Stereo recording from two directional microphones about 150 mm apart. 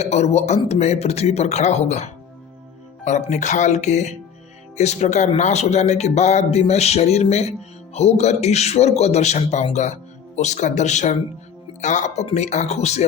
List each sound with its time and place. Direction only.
0.0 s speech: 45° left (ahead or behind)